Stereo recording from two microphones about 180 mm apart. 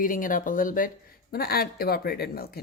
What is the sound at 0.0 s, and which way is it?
Speech, 50° left (ahead or behind).